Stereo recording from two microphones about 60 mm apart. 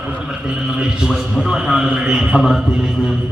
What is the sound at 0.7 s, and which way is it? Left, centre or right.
A man's voice, centre.